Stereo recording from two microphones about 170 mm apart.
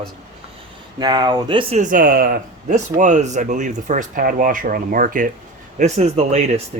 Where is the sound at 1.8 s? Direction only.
55° right (ahead or behind).